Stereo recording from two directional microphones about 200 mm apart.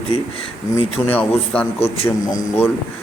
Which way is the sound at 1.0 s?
10° left (ahead or behind).